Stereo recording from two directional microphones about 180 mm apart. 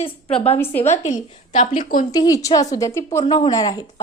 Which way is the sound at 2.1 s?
20° left (ahead or behind).